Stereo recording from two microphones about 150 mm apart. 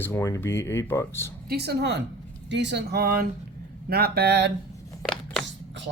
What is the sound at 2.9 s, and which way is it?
Speech, 85° right.